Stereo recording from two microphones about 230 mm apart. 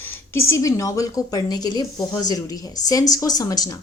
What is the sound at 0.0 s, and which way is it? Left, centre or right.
A woman's voice, centre.